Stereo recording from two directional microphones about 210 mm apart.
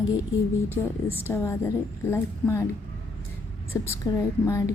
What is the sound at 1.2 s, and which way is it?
Speech, 10° left (ahead or behind).